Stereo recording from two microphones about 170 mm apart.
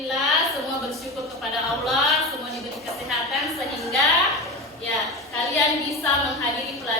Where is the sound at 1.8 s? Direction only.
Centre (ahead or behind).